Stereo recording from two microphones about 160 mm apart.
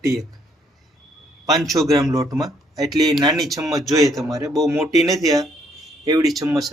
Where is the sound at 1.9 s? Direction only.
20° right (ahead or behind).